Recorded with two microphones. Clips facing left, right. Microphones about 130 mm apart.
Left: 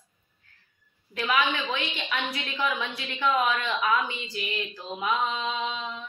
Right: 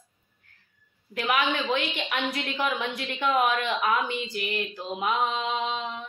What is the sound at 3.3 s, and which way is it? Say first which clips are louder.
A woman's voice: right 1 dB; 50° right (ahead or behind).